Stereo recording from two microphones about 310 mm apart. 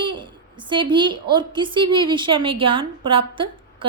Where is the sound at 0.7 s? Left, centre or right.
Centre.